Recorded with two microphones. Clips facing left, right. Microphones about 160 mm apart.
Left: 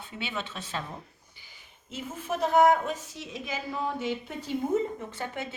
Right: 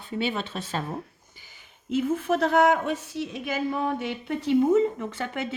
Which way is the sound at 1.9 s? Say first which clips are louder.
Right 10 dB; 65° right (ahead or behind).